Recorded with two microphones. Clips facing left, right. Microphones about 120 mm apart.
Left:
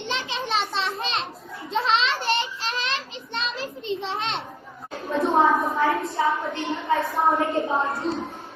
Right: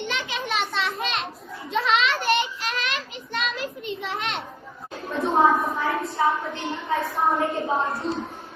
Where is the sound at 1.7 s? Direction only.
30° left (ahead or behind).